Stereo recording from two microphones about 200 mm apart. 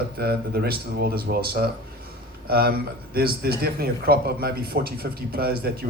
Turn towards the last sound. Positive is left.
turn(degrees=-50)  # may be behind; listen again after turning